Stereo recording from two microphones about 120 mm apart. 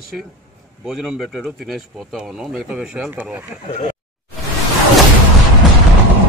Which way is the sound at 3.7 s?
90° left.